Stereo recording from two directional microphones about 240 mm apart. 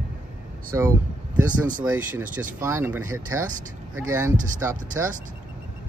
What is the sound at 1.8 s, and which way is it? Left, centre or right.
Speech, centre.